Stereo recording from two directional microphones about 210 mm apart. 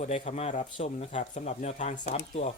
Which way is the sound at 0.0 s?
30° left (ahead or behind).